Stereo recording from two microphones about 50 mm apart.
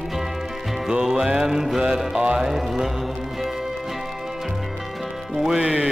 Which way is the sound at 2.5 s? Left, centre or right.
Centre.